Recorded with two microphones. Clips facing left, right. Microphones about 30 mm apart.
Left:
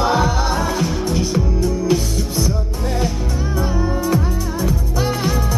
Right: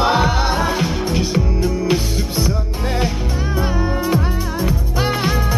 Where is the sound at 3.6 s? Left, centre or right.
Right.